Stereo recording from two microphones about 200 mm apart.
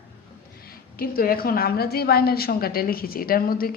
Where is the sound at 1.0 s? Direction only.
50° left (ahead or behind).